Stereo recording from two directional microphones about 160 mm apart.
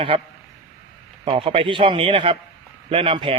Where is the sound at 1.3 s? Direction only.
35° right (ahead or behind).